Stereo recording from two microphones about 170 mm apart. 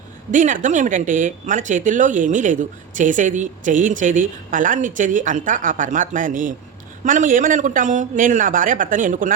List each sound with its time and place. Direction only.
0.3 s speech: 50° right (ahead or behind)